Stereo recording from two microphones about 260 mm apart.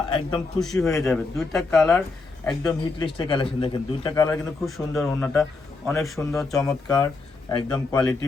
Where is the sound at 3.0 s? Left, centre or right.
Centre.